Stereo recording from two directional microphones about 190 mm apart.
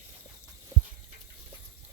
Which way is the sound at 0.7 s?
15° right (ahead or behind).